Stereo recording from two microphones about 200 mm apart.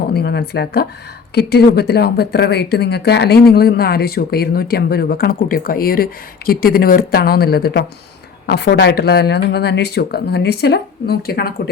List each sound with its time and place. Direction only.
0.1 s speech: 55° left (ahead or behind)